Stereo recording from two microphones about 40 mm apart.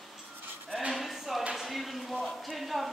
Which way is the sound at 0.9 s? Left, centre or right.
Centre.